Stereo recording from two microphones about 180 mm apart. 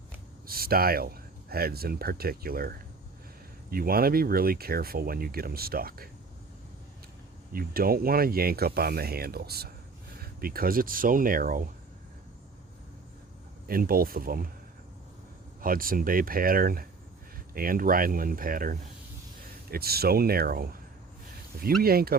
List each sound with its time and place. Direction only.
0.4 s speech: 55° right (ahead or behind)
7.5 s speech: 55° right (ahead or behind)
13.7 s speech: 55° right (ahead or behind)
15.6 s speech: 50° right (ahead or behind)
21.8 s speech: 60° right (ahead or behind)